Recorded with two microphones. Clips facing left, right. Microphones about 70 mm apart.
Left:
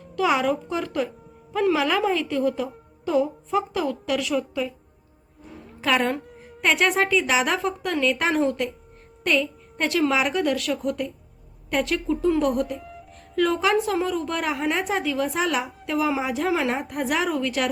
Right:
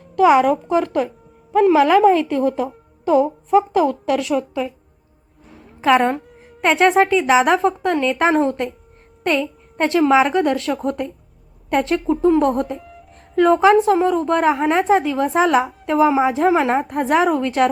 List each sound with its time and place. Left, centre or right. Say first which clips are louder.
0.2 s a woman's voice: right 9 dB; right
5.8 s a woman's voice: right 7 dB; right
12.8 s music: even; centre
13.3 s a woman's voice: right 8 dB; right